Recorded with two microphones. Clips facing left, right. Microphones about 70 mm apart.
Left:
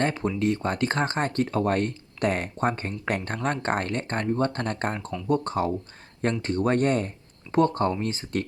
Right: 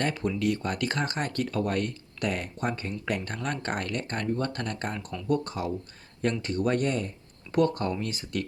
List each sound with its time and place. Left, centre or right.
0.0 s speech: left
7.5 s speech: left